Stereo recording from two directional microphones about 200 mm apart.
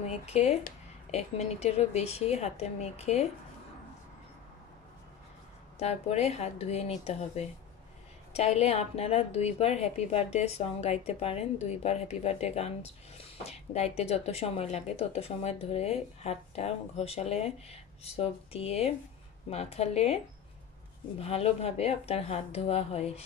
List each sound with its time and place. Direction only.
0.0 s a woman's voice: 35° left (ahead or behind)
5.8 s a woman's voice: 30° left (ahead or behind)
21.2 s a woman's voice: 30° left (ahead or behind)